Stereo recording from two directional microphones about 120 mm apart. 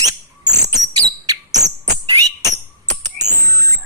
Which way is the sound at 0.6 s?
30° right (ahead or behind).